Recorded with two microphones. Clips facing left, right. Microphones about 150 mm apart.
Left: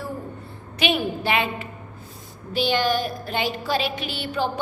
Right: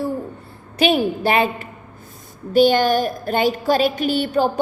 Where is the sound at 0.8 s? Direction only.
40° right (ahead or behind).